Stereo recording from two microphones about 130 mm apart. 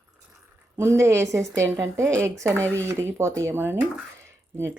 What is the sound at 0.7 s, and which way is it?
Speech, 20° right (ahead or behind).